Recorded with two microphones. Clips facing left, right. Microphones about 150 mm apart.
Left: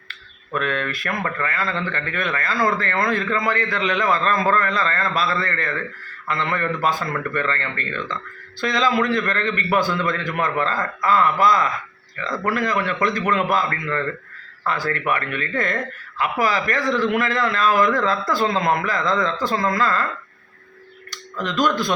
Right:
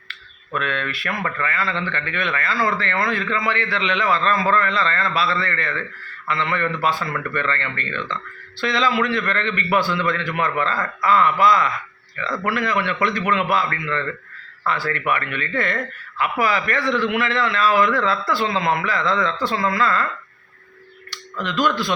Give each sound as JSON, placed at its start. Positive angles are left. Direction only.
{"t": 0.1, "sound": "speech", "side_deg": 40}
{"t": 21.1, "sound": "tick", "side_deg": 40}
{"t": 21.6, "sound": "speech", "side_deg": 45}